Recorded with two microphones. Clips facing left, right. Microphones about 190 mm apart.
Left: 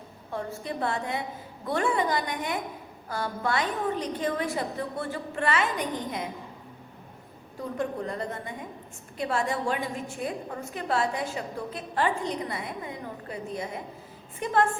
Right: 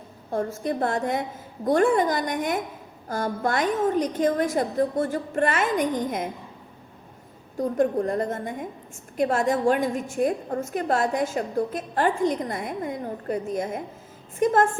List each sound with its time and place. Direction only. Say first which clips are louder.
0.6 s a woman's voice: right 4 dB; 45° right (ahead or behind)
7.6 s a woman's voice: right 8 dB; 50° right (ahead or behind)